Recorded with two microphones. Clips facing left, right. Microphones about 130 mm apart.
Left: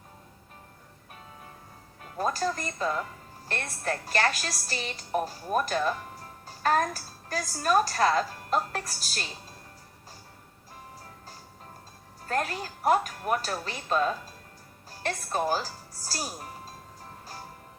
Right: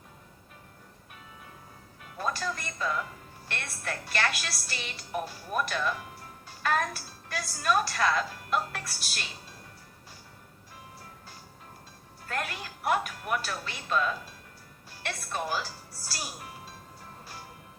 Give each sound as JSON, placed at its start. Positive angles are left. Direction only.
{"t": 2.0, "sound": "a woman's voice", "side_deg": 40}
{"t": 12.2, "sound": "a woman's voice", "side_deg": 40}
{"t": 14.8, "sound": "music", "side_deg": 40}